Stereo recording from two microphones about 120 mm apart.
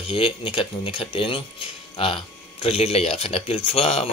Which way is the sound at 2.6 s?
55° left (ahead or behind).